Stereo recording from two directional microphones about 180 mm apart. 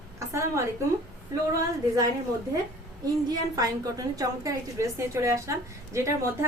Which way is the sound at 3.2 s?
20° right (ahead or behind).